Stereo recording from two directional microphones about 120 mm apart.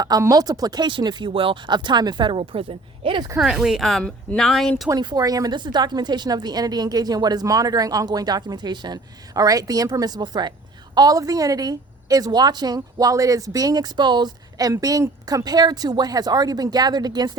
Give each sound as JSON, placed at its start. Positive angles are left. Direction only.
{"t": 0.0, "sound": "a woman's voice", "side_deg": -30}
{"t": 3.3, "sound": "speech", "side_deg": -5}
{"t": 4.9, "sound": "a woman's voice", "side_deg": -35}